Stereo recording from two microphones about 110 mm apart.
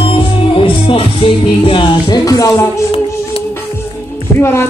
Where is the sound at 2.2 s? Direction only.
30° left (ahead or behind).